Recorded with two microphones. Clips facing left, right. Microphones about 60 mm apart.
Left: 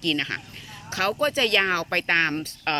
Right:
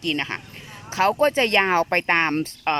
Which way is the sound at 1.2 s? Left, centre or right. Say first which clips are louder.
Right 1 dB; right.